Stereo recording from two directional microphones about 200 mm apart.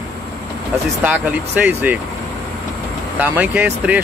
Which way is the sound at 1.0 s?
10° right (ahead or behind).